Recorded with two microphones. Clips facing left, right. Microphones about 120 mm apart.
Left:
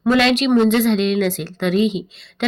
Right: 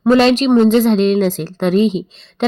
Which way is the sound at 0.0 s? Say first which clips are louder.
Right 4 dB; 35° right (ahead or behind).